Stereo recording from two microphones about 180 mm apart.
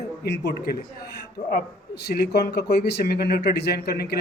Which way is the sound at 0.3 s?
65° left (ahead or behind).